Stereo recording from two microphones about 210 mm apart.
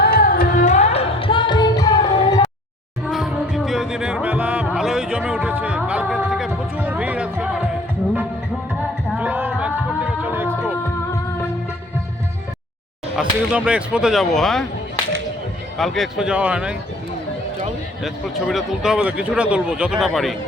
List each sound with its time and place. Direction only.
0.0 s music: 45° left (ahead or behind); by 2.5 s 20° left (ahead or behind)
3.1 s music: centre (ahead or behind)
9.0 s music: 5° right (ahead or behind)
13.1 s speech: 5° right (ahead or behind)
15.8 s speech: centre (ahead or behind)
18.0 s speech: centre (ahead or behind)